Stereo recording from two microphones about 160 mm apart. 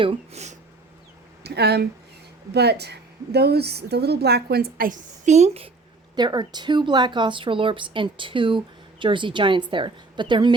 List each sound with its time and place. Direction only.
0.0 s speech: 40° right (ahead or behind)
1.5 s a woman's voice: 90° right; by 5.7 s 40° right (ahead or behind)
6.1 s speech: 25° right (ahead or behind)